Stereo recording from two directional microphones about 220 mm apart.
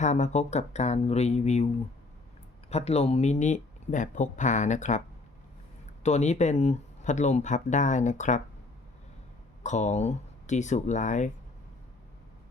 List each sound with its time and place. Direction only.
0.0 s speech: 30° left (ahead or behind)
2.6 s speech: 30° left (ahead or behind)
9.6 s speech: 30° left (ahead or behind)